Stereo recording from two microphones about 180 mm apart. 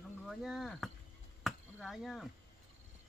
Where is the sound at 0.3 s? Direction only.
Centre (ahead or behind).